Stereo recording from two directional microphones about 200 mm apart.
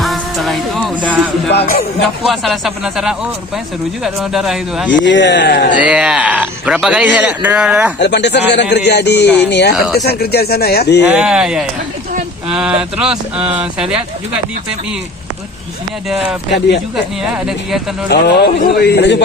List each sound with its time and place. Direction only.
0.0 s music: centre (ahead or behind)
1.5 s music: 55° left (ahead or behind)
2.2 s a man's voice: centre (ahead or behind)
4.9 s speech: 65° left (ahead or behind)
5.8 s a man's voice: 5° right (ahead or behind)
7.9 s speech: 60° left (ahead or behind)
11.0 s a man's voice: 5° right (ahead or behind)
16.5 s speech: 60° left (ahead or behind)
17.3 s a man's voice: 5° right (ahead or behind)
18.1 s speech: 55° left (ahead or behind)